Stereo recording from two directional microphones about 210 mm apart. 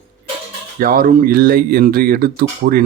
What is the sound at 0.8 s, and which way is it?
Speech, 45° right (ahead or behind).